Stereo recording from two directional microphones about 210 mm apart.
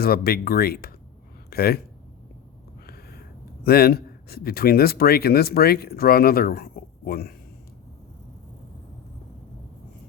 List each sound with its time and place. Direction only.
0.0 s speech: 45° left (ahead or behind)
2.8 s speech: 45° left (ahead or behind)